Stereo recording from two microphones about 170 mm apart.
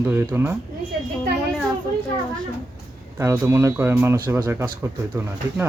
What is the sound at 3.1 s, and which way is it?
Speech, 15° right (ahead or behind).